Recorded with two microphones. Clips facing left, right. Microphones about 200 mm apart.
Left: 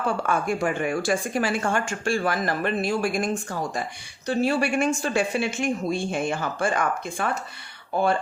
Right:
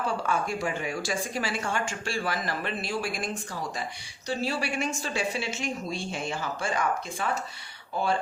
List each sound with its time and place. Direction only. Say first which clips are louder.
0.2 s speech: left 4 dB; 55° left (ahead or behind)